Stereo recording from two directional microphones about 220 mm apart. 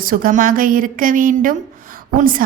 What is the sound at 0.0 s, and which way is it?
A woman's voice, 40° right (ahead or behind).